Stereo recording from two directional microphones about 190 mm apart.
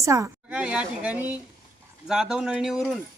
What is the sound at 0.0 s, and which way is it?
A woman's voice, 15° right (ahead or behind).